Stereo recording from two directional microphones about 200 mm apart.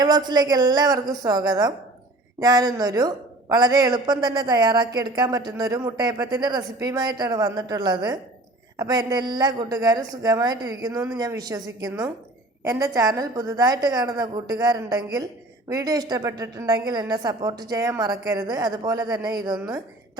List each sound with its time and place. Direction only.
0.0 s speech: 20° right (ahead or behind)